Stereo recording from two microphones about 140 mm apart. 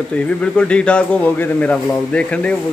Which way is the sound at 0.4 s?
10° left (ahead or behind).